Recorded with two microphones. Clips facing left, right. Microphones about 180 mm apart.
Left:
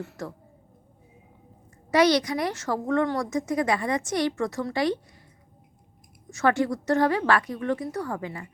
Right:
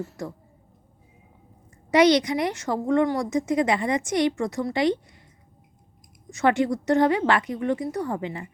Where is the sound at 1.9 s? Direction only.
20° right (ahead or behind).